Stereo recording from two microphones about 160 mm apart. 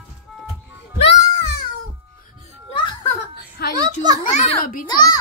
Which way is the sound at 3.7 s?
25° right (ahead or behind).